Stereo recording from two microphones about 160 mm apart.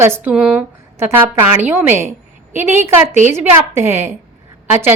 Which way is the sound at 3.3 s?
15° right (ahead or behind).